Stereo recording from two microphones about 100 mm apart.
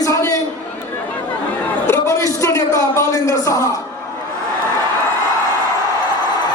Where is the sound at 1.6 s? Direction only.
20° left (ahead or behind).